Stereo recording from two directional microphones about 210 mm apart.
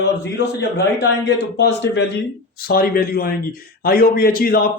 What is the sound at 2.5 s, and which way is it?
A man's voice, 45° left (ahead or behind).